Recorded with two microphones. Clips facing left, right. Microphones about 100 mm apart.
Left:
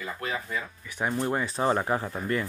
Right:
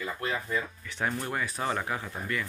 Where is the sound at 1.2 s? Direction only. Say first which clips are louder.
Left 5 dB; 25° left (ahead or behind).